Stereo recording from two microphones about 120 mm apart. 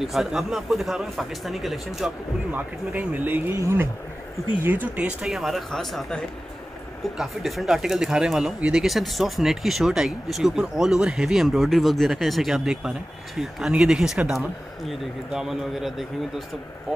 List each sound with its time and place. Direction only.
0.0 s speech: 5° right (ahead or behind)
2.5 s speech: 15° right (ahead or behind)